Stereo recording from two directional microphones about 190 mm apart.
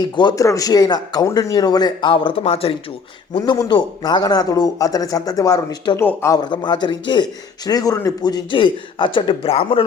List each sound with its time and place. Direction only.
0.0 s speech: 20° left (ahead or behind)